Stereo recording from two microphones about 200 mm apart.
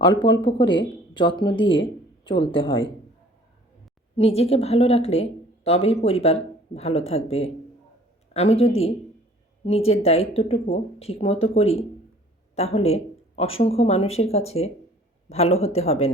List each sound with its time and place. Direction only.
0.0 s speech: 25° left (ahead or behind)
4.2 s a woman's voice: 30° left (ahead or behind)